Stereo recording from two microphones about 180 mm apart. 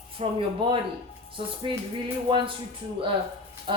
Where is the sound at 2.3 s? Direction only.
30° right (ahead or behind).